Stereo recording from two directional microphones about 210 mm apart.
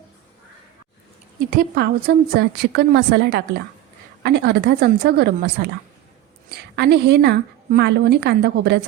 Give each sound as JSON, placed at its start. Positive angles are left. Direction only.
{"t": 1.5, "sound": "a woman's voice", "side_deg": -45}